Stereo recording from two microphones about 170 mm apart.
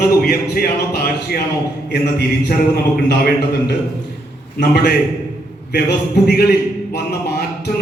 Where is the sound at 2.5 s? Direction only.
65° left (ahead or behind).